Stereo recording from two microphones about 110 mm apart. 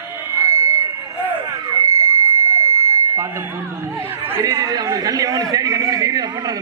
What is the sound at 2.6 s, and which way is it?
Buzzer, 25° right (ahead or behind).